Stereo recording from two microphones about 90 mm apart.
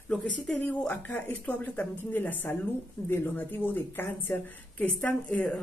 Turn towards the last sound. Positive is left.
turn(degrees=15)  # may be behind; listen again after turning